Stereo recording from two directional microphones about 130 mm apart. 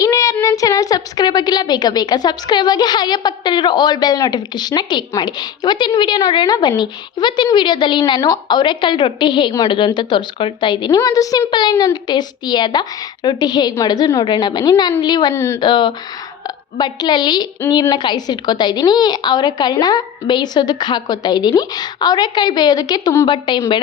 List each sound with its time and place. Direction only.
0.0 s child singing: 25° left (ahead or behind)
0.4 s a woman's voice: 25° left (ahead or behind)
15.4 s speech: 20° left (ahead or behind)
15.6 s a woman's voice: 35° left (ahead or behind)